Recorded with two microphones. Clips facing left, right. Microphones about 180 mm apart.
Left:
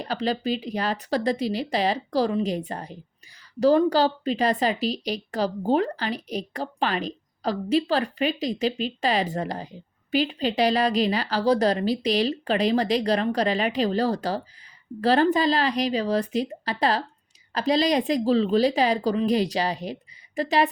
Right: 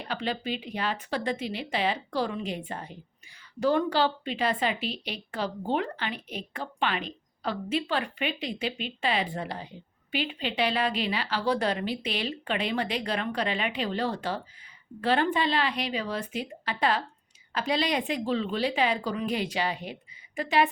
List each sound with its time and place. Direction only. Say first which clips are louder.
0.0 s a woman's voice: left 6 dB; 35° left (ahead or behind)